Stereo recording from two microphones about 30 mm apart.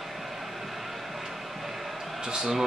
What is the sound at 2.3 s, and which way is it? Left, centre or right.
Speech, right.